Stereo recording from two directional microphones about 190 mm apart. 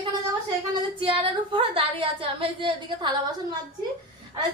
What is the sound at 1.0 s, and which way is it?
A woman's voice, 30° right (ahead or behind).